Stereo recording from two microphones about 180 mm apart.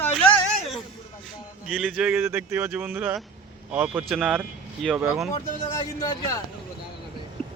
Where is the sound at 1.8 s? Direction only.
5° right (ahead or behind).